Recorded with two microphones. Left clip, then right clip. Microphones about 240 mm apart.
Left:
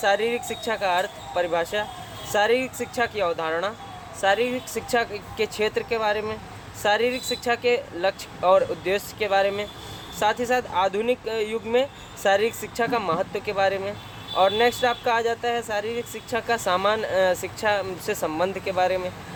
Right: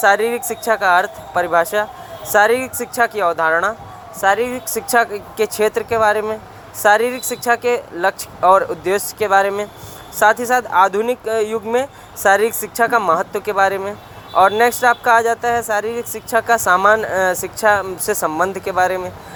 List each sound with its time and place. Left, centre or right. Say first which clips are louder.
0.0 s speech: right 8 dB; centre